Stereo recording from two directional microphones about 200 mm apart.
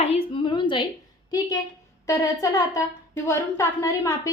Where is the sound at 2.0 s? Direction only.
15° left (ahead or behind).